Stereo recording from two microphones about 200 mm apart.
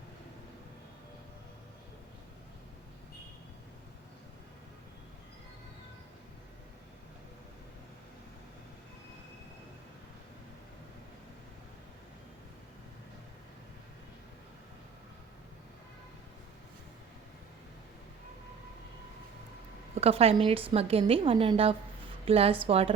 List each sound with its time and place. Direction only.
20.0 s a woman's voice: 30° right (ahead or behind)